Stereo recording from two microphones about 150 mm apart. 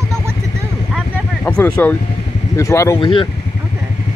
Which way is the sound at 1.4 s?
10° left (ahead or behind).